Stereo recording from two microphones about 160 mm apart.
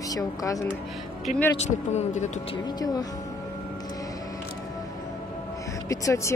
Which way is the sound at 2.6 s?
25° left (ahead or behind).